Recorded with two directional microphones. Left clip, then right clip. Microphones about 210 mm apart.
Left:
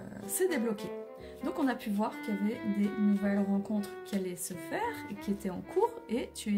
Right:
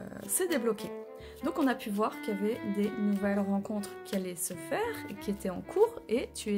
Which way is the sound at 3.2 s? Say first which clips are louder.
Right 1 dB; 25° right (ahead or behind).